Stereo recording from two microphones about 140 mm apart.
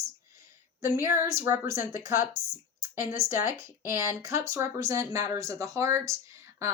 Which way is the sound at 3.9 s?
20° right (ahead or behind).